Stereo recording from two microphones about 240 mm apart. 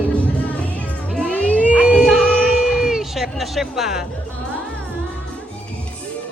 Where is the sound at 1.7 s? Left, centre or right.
Centre.